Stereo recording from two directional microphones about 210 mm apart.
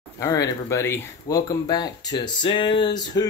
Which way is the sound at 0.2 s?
15° left (ahead or behind).